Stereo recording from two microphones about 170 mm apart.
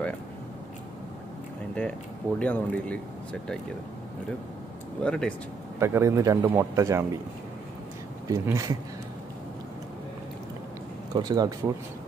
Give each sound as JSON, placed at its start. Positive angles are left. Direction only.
{"t": 1.8, "sound": "speech", "side_deg": 5}
{"t": 5.0, "sound": "speech", "side_deg": 5}
{"t": 5.8, "sound": "a man's voice", "side_deg": -15}
{"t": 8.3, "sound": "speech", "side_deg": -20}
{"t": 11.1, "sound": "speech", "side_deg": -25}